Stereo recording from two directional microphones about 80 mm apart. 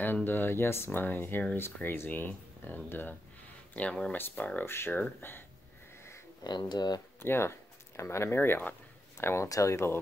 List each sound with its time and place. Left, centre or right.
0.0 s speech: left
3.7 s speech: centre
4.6 s speech: left
6.4 s speech: left
7.2 s speech: left